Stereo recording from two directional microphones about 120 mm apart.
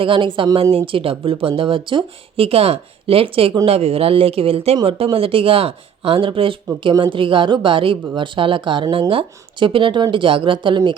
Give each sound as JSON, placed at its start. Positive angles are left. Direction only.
{"t": 0.0, "sound": "speech", "side_deg": -45}
{"t": 4.8, "sound": "speech", "side_deg": -45}